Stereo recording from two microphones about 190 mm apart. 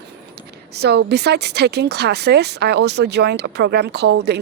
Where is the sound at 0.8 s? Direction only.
60° right (ahead or behind).